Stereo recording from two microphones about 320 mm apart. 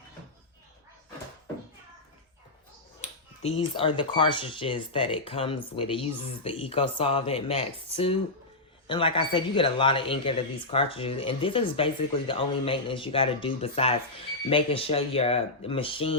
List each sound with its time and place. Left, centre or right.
3.0 s speech: centre